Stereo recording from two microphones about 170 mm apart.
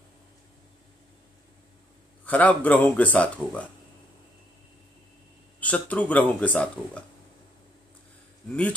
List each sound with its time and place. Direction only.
2.2 s speech: 10° left (ahead or behind)
5.6 s speech: 10° left (ahead or behind)